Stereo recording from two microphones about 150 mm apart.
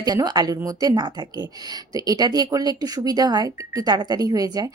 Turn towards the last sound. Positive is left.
turn(degrees=-25)  # may be behind; listen again after turning